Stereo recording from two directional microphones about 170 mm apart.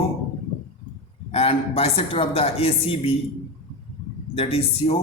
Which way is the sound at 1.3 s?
35° left (ahead or behind).